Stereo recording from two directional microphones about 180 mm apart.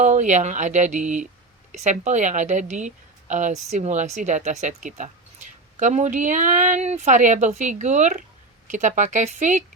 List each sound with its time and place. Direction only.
0.0 s a woman's voice: 45° right (ahead or behind)